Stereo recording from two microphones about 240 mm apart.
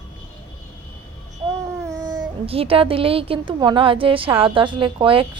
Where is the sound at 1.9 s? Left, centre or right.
Centre.